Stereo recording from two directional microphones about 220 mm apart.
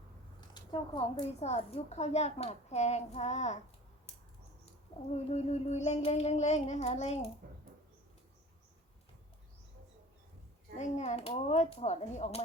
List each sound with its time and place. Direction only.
0.3 s a woman's voice: 20° left (ahead or behind)
5.1 s child singing: 30° left (ahead or behind)
10.8 s child singing: 30° left (ahead or behind)